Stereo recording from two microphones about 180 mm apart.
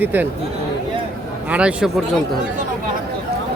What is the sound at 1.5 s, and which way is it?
Speech, 5° right (ahead or behind).